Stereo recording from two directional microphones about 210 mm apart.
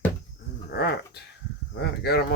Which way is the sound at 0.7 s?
50° left (ahead or behind).